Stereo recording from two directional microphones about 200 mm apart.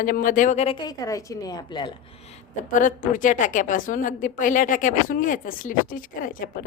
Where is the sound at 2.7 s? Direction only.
40° left (ahead or behind).